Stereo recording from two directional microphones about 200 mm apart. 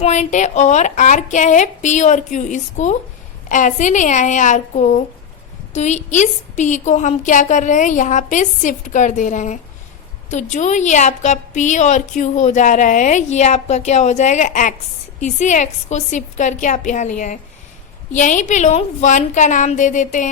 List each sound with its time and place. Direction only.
0.0 s a woman's voice: 35° left (ahead or behind)